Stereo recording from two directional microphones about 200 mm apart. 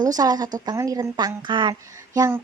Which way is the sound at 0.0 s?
20° right (ahead or behind).